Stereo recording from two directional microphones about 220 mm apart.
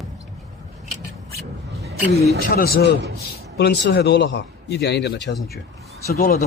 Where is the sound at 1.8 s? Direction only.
45° right (ahead or behind).